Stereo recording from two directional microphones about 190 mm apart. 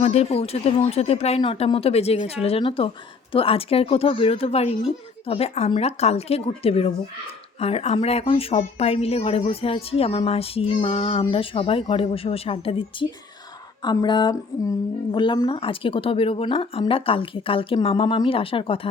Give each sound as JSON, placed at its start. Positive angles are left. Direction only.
{"t": 0.0, "sound": "a woman's voice", "side_deg": 35}